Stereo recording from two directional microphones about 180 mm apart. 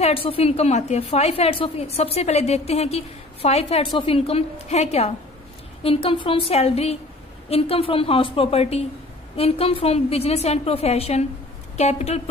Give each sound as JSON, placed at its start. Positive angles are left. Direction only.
{"t": 0.0, "sound": "a woman's voice", "side_deg": 30}